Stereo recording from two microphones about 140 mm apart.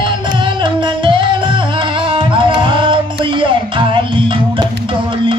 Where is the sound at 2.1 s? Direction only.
35° right (ahead or behind).